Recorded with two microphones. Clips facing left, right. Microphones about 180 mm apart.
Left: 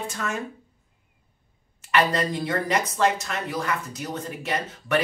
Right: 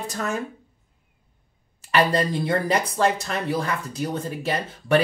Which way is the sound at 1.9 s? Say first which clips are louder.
Right 2 dB; 35° right (ahead or behind).